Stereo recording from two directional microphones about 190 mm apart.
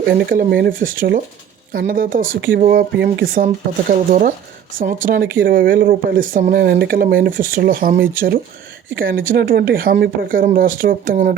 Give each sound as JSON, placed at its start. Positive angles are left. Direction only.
{"t": 0.0, "sound": "speech", "side_deg": -50}